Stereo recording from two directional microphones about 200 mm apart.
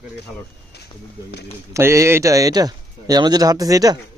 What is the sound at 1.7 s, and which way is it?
Speech, 15° right (ahead or behind).